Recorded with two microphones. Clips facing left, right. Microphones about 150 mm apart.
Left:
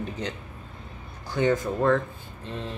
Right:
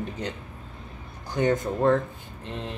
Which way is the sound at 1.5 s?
20° right (ahead or behind).